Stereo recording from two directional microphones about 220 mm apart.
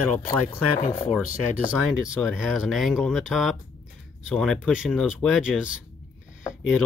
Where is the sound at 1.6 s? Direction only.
Centre (ahead or behind).